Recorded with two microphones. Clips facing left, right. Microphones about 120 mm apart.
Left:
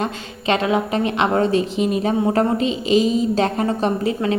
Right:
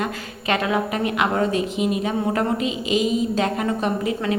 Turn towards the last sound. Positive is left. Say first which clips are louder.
# left 3 dB
turn(degrees=35)  # may be behind; listen again after turning